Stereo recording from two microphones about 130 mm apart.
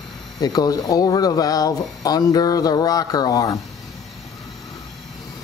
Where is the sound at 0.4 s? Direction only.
30° left (ahead or behind).